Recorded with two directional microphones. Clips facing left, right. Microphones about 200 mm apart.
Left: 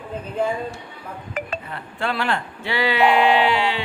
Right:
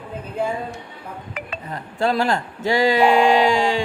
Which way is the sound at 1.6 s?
40° right (ahead or behind).